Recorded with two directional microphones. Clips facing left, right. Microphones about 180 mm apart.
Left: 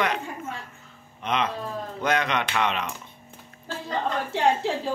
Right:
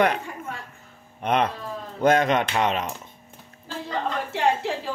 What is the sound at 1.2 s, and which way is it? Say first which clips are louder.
A man's voice: right 3 dB; 55° right (ahead or behind).